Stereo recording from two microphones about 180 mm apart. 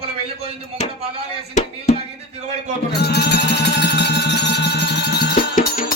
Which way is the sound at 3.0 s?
65° left (ahead or behind).